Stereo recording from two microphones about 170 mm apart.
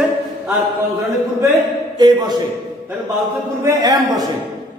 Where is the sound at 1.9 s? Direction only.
25° right (ahead or behind).